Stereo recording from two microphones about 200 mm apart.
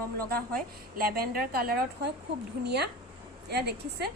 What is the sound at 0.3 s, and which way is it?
A woman's voice, 45° right (ahead or behind).